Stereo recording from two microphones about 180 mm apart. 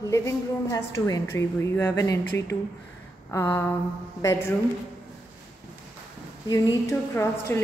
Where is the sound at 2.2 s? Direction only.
20° left (ahead or behind).